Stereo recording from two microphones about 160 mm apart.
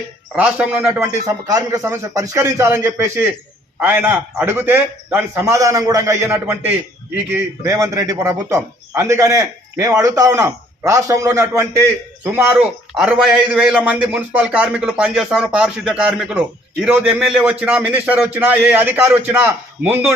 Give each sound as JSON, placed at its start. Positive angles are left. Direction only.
{"t": 0.3, "sound": "a man's voice", "side_deg": -5}
{"t": 1.3, "sound": "a man's voice", "side_deg": -25}